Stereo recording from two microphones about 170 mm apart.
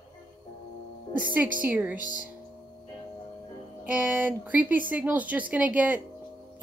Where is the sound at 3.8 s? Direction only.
10° right (ahead or behind).